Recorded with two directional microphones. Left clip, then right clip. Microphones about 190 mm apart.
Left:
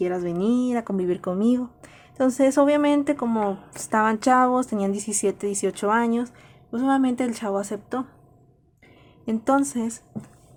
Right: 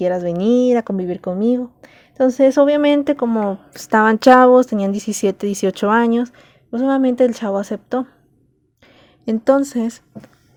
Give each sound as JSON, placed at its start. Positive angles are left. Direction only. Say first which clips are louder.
{"t": 0.0, "sound": "speech", "louder": "right 7 dB", "side_deg": -30}
{"t": 0.9, "sound": "speech", "louder": "right 3 dB", "side_deg": -20}
{"t": 9.2, "sound": "speech", "louder": "right 7 dB", "side_deg": -25}